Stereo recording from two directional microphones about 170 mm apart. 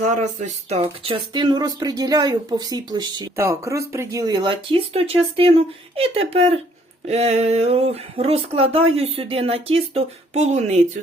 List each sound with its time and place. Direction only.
0.1 s speech: 45° right (ahead or behind)